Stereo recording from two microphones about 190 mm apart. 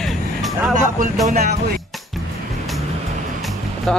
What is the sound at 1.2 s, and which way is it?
Speech, 40° right (ahead or behind).